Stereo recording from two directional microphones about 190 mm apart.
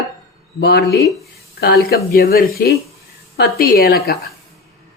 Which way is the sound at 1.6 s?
55° left (ahead or behind).